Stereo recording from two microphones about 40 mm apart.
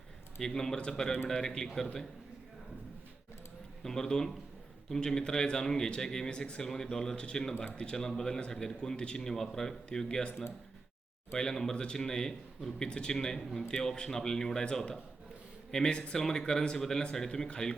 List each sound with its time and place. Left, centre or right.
0.3 s a man's voice: centre
3.8 s a man's voice: centre
11.3 s a man's voice: centre
15.7 s a man's voice: centre